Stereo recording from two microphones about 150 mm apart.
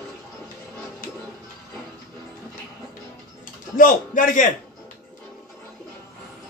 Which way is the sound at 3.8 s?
60° left (ahead or behind).